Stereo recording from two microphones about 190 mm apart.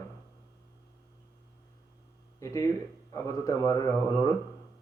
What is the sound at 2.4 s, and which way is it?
A man's voice, 15° left (ahead or behind).